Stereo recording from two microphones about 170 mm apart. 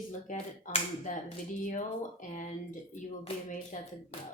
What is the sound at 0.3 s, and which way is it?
Speech, 50° left (ahead or behind).